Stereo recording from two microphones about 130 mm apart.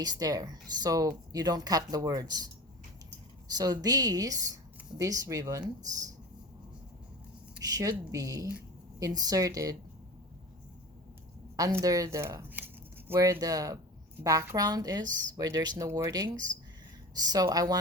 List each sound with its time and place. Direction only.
0.0 s speech: 30° right (ahead or behind)
3.5 s speech: 30° right (ahead or behind)
7.6 s speech: 30° right (ahead or behind)
11.5 s speech: 25° right (ahead or behind)